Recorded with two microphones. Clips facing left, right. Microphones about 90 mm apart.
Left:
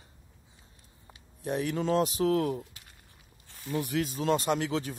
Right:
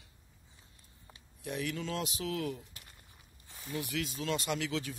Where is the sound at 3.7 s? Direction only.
45° left (ahead or behind).